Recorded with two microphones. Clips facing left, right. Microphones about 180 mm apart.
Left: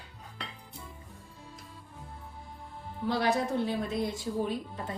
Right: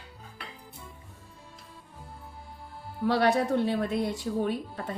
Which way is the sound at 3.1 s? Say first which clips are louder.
Right 4 dB; 65° right (ahead or behind).